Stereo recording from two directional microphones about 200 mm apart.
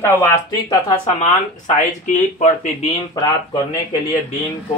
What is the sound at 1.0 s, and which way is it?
Speech, 35° left (ahead or behind).